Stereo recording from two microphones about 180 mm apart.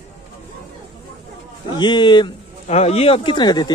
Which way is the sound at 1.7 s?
25° left (ahead or behind).